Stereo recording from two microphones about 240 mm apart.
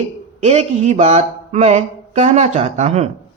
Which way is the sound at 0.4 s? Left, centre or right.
Right.